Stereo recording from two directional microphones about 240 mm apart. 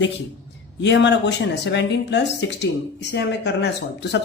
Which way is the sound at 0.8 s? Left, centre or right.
Left.